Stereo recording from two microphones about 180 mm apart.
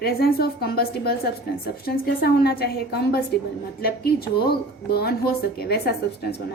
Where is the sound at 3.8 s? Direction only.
60° left (ahead or behind).